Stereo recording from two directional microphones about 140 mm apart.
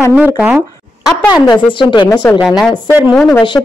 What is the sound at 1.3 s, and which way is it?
Speech, 30° left (ahead or behind).